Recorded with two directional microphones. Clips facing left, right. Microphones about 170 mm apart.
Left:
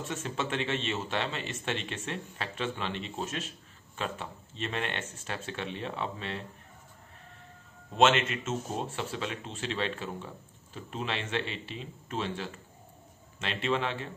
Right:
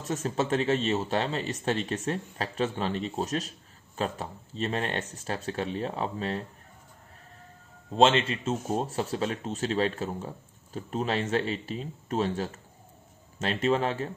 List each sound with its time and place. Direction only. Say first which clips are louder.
0.0 s speech: right 5 dB; 40° right (ahead or behind)
7.9 s speech: right 2 dB; 30° right (ahead or behind)